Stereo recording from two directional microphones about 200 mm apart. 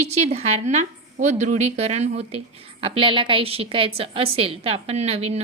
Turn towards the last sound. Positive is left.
turn(degrees=-30)  # may be behind; listen again after turning